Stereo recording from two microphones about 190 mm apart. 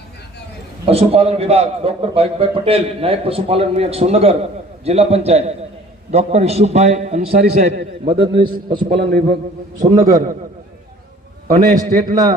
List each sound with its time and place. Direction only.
0.9 s a man's voice: 30° right (ahead or behind)
7.3 s a man's voice: 60° right (ahead or behind)
8.0 s a man's voice: 30° right (ahead or behind)
9.0 s a man's voice: 55° right (ahead or behind)
10.0 s a man's voice: 45° right (ahead or behind)
11.4 s a man's voice: 45° right (ahead or behind)